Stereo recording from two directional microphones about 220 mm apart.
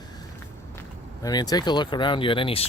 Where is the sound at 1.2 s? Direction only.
15° left (ahead or behind).